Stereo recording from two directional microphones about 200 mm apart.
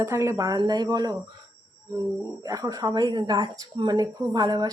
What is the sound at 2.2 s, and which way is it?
Speech, 15° right (ahead or behind).